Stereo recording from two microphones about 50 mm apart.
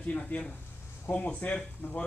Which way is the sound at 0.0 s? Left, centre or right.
Left.